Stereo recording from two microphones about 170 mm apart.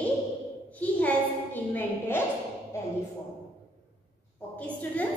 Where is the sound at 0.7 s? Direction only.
10° left (ahead or behind).